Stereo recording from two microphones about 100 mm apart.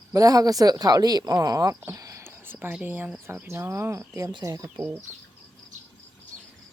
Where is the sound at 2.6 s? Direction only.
15° right (ahead or behind); by 4.8 s 35° right (ahead or behind).